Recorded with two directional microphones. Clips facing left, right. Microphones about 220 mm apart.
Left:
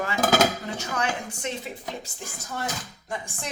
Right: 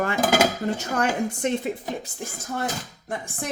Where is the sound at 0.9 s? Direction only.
50° right (ahead or behind).